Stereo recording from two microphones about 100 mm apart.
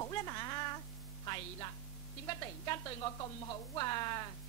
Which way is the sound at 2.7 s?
40° left (ahead or behind).